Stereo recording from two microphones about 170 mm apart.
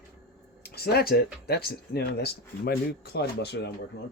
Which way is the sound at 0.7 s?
65° left (ahead or behind).